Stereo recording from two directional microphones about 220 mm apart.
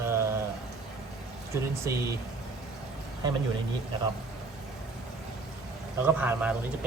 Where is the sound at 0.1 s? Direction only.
10° right (ahead or behind).